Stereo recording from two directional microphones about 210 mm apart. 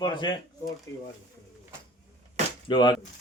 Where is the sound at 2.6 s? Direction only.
20° left (ahead or behind).